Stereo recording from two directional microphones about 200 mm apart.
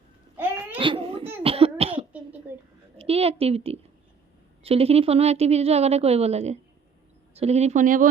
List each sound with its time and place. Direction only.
0.3 s babbling: 10° right (ahead or behind)
0.8 s baby cry: 25° right (ahead or behind)
1.4 s cough: 30° right (ahead or behind)
3.0 s a woman's voice: 30° right (ahead or behind)